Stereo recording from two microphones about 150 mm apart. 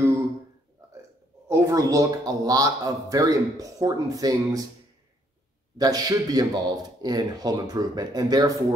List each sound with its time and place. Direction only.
1.5 s a man's voice: 20° right (ahead or behind)
5.8 s a man's voice: 25° right (ahead or behind)